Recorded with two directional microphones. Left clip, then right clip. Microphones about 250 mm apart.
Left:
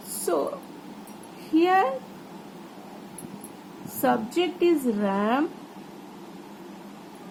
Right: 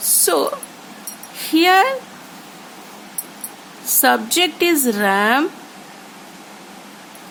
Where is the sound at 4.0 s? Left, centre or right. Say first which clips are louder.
Right 9 dB; right.